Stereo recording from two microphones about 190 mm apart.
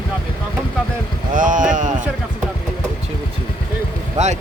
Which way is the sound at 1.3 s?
45° right (ahead or behind).